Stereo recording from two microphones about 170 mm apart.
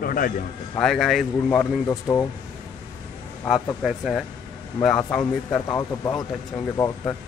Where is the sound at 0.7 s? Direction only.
Centre (ahead or behind).